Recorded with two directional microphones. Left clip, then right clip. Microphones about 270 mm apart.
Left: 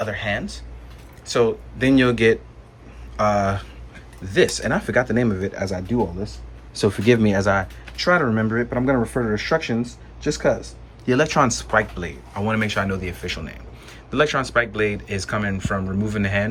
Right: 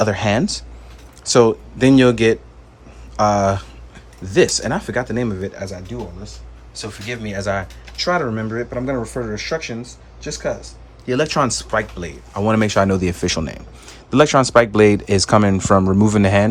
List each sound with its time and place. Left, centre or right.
0.0 s speech: centre
6.7 s speech: centre